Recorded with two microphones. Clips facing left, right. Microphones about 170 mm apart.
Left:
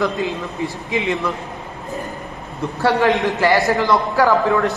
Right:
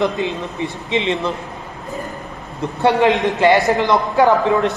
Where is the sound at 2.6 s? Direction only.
20° right (ahead or behind).